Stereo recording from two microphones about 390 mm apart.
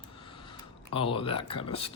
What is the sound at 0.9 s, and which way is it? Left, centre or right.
Speech, centre.